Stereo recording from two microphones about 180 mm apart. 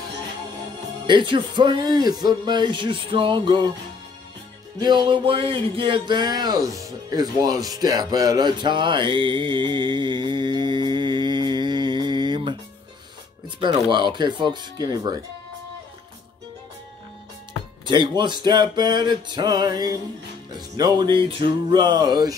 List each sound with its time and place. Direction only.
1.0 s speech: 25° right (ahead or behind)
4.7 s speech: 25° right (ahead or behind)
13.6 s speech: 25° right (ahead or behind)
17.8 s speech: 25° right (ahead or behind)